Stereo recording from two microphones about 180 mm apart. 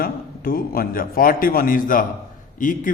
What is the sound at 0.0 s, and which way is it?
A man's voice, 55° left (ahead or behind).